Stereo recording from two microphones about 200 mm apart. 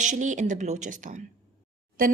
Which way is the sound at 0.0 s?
40° right (ahead or behind).